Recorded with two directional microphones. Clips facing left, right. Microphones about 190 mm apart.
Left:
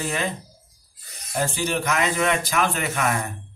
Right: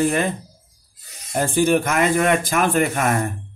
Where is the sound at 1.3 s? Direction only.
50° right (ahead or behind).